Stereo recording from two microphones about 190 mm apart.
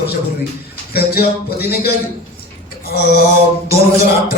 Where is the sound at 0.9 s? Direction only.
55° left (ahead or behind).